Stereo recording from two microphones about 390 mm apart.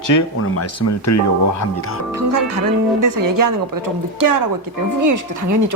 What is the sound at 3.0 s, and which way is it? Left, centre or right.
Speech, right.